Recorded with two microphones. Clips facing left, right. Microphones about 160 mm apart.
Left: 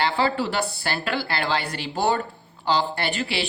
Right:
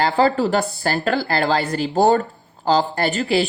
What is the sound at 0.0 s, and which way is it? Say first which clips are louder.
A woman's voice: right 6 dB; 40° right (ahead or behind).